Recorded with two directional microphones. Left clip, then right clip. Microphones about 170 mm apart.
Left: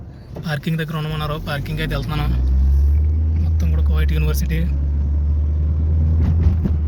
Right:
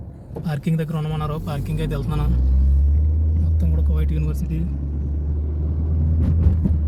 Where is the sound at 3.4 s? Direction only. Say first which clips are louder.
Even; 25° right (ahead or behind).